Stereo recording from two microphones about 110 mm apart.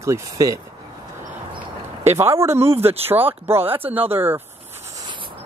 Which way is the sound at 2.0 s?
25° right (ahead or behind).